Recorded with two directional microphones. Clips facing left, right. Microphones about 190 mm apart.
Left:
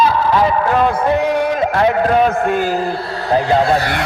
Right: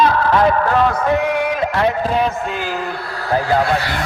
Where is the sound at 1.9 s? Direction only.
65° left (ahead or behind); by 3.0 s 35° left (ahead or behind).